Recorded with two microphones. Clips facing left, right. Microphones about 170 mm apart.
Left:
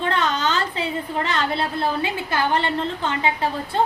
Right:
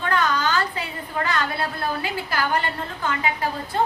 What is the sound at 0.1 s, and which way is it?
A woman's voice, 25° left (ahead or behind).